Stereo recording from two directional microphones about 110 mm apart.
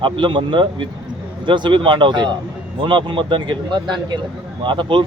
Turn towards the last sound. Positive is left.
turn(degrees=-45)  # may be behind; listen again after turning